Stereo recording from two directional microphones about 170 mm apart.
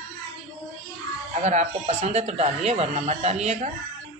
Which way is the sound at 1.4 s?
40° right (ahead or behind).